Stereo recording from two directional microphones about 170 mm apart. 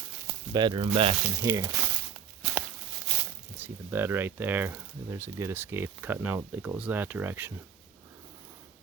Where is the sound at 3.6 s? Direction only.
15° right (ahead or behind).